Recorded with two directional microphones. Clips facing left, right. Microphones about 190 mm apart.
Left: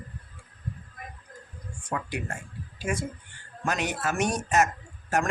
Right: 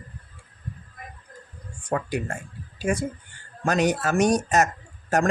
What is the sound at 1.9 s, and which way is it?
Speech, 35° right (ahead or behind).